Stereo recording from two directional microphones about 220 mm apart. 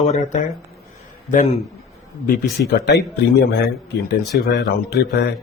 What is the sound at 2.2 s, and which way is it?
Speech, 45° left (ahead or behind).